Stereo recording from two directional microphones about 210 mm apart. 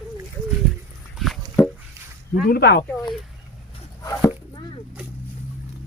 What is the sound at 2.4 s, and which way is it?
Speech, 50° left (ahead or behind).